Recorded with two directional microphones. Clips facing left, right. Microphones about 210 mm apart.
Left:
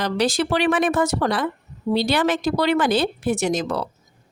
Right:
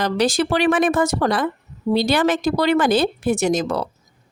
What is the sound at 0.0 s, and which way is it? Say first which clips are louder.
A woman's voice: right 2 dB; 45° right (ahead or behind).